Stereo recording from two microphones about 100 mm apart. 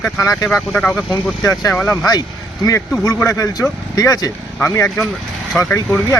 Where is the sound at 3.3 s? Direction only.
35° left (ahead or behind).